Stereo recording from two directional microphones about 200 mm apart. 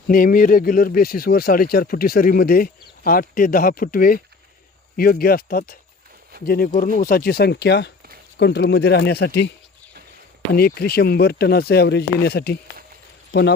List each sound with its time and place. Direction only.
0.1 s speech: 45° left (ahead or behind)
10.5 s speech: 50° left (ahead or behind)